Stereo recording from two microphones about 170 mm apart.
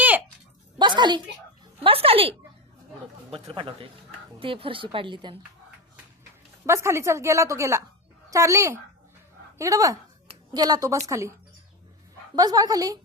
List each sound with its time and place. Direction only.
0.8 s a sound: 25° right (ahead or behind)
1.8 s speech: 35° right (ahead or behind)
3.3 s speech: 30° right (ahead or behind)
6.7 s a woman's voice: 15° right (ahead or behind)
12.4 s a woman's voice: 20° right (ahead or behind)